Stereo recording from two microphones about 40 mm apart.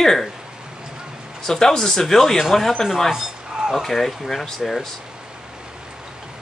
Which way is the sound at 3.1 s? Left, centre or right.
Centre.